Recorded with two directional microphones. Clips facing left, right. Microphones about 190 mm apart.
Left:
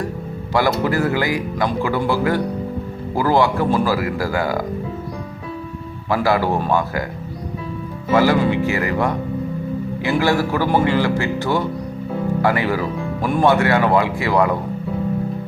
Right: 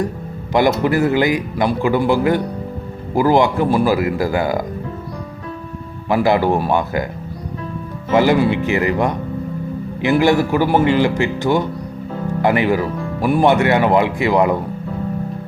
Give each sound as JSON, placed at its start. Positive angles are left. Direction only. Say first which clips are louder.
{"t": 0.5, "sound": "a man's voice", "louder": "right 3 dB", "side_deg": -20}
{"t": 6.1, "sound": "speech", "louder": "right 3 dB", "side_deg": -20}
{"t": 8.1, "sound": "a man's voice", "louder": "right 2 dB", "side_deg": -20}